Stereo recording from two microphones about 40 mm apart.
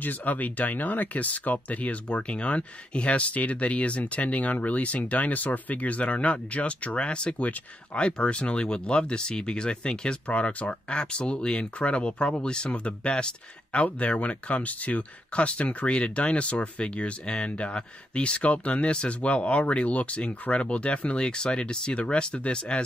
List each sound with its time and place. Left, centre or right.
0.0 s speech: left
2.0 s speech: left